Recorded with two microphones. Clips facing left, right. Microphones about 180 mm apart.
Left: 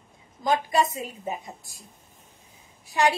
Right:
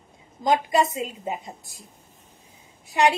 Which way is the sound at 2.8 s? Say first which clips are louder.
Right 2 dB; 20° right (ahead or behind).